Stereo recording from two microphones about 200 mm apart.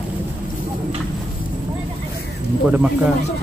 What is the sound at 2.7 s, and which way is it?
Speech, 5° right (ahead or behind).